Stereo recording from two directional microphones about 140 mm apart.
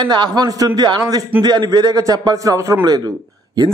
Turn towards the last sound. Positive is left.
turn(degrees=-30)  # may be behind; listen again after turning